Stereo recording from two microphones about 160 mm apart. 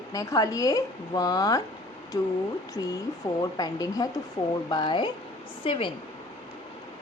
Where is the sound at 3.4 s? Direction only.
25° left (ahead or behind).